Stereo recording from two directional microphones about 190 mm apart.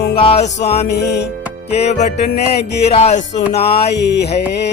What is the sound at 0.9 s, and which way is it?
Music, 60° left (ahead or behind).